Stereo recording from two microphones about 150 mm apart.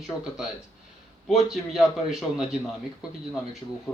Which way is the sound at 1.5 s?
Centre (ahead or behind).